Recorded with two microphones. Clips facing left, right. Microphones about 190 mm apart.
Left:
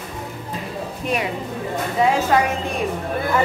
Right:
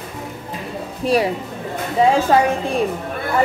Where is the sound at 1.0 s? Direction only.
35° right (ahead or behind).